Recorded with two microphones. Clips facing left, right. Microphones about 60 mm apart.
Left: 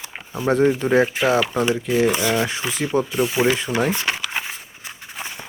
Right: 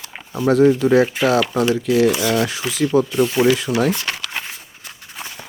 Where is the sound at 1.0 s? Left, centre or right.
Centre.